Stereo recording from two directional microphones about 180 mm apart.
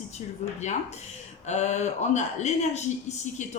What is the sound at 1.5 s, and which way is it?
Speech, 40° left (ahead or behind).